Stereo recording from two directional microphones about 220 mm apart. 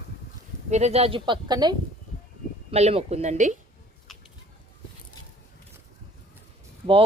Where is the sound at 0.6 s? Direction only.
30° right (ahead or behind).